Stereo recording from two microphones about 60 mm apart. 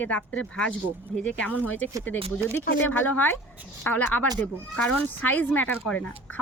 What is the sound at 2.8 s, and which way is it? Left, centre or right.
Speech, left.